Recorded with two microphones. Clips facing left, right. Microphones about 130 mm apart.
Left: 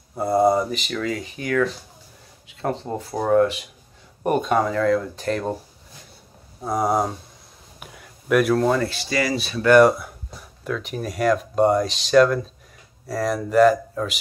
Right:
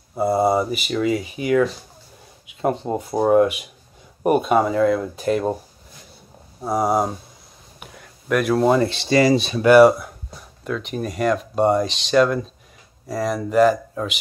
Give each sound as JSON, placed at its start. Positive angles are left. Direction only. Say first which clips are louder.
{"t": 0.2, "sound": "speech", "louder": "even", "side_deg": -5}
{"t": 6.6, "sound": "speech", "louder": "right 2 dB", "side_deg": -5}
{"t": 7.8, "sound": "a sound", "louder": "right 1 dB", "side_deg": 0}
{"t": 8.6, "sound": "speech", "louder": "right 4 dB", "side_deg": -20}
{"t": 9.7, "sound": "speech", "louder": "right 3 dB", "side_deg": -5}